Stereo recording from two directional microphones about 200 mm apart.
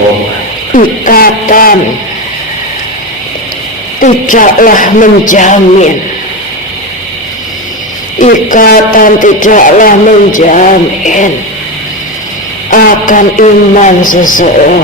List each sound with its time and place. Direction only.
0.7 s a man's voice: 45° left (ahead or behind)
4.0 s speech: 40° left (ahead or behind)
8.2 s a man's voice: 40° left (ahead or behind)
12.7 s speech: 40° left (ahead or behind)